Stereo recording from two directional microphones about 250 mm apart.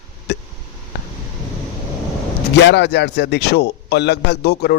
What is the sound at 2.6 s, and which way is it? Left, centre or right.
A man's voice, left.